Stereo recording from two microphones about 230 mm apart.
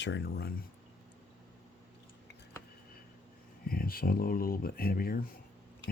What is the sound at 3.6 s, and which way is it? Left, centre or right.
Speech, left.